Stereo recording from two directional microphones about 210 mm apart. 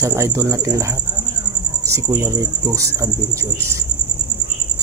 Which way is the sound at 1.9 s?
15° right (ahead or behind).